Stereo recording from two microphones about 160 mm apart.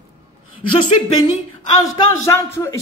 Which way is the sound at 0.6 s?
30° left (ahead or behind).